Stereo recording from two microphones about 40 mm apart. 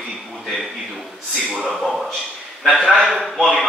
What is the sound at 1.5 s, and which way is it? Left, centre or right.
Speech, right.